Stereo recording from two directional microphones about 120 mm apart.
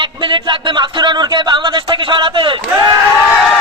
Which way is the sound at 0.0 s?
40° right (ahead or behind).